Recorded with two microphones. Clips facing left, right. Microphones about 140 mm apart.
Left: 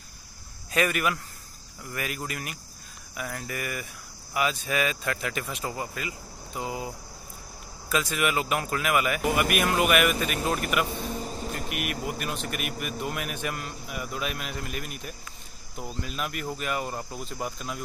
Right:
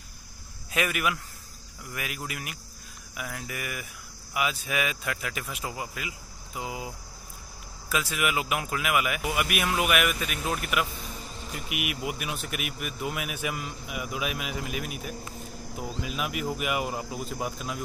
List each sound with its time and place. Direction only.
0.7 s a man's voice: 5° right (ahead or behind)
7.9 s a man's voice: 5° right (ahead or behind)
10.9 s vehicle: 45° left (ahead or behind)
11.7 s a man's voice: 10° right (ahead or behind)